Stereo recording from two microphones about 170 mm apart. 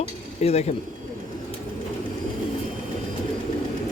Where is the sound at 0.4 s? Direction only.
40° left (ahead or behind).